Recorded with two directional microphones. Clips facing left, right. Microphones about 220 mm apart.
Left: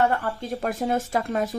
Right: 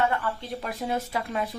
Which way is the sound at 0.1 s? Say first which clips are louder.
Left 3 dB; 45° left (ahead or behind).